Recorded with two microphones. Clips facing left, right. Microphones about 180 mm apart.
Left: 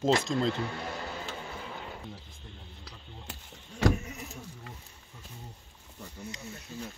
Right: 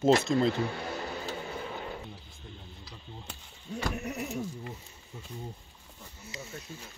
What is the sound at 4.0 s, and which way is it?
Sheep, 65° right (ahead or behind).